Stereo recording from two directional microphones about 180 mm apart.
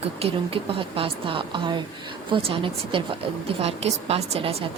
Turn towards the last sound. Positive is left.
turn(degrees=-35)  # may be behind; listen again after turning